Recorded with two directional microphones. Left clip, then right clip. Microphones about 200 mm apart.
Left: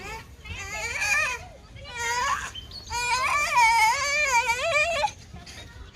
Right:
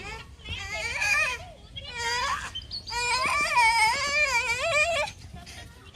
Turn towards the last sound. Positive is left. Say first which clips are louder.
# left 1 dB
turn(degrees=15)  # may be behind; listen again after turning